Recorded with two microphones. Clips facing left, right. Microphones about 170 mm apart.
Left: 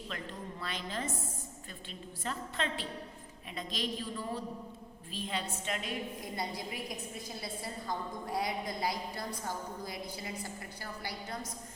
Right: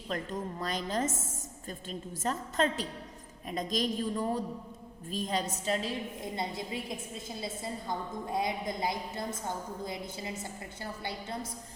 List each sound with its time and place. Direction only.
0.1 s a woman's voice: 40° right (ahead or behind); by 10.5 s 25° right (ahead or behind)